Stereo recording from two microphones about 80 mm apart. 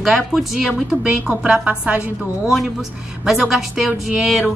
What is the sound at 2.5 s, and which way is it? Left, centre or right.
A woman's voice, centre.